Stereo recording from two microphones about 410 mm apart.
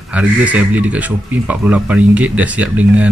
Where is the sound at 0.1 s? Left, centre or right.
Centre.